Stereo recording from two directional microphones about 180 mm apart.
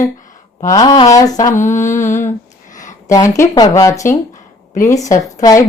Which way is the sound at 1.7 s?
45° left (ahead or behind).